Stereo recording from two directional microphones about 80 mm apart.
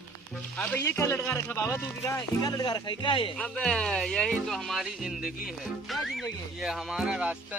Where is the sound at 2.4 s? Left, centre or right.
Left.